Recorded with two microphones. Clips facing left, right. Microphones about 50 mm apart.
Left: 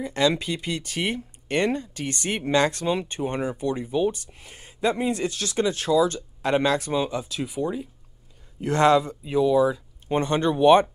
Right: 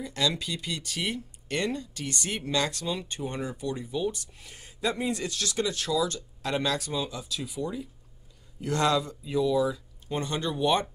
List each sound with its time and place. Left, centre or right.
0.0 s speech: left